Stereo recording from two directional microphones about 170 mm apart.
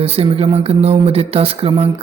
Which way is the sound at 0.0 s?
35° right (ahead or behind).